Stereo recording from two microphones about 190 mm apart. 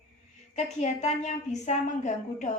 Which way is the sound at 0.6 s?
35° left (ahead or behind).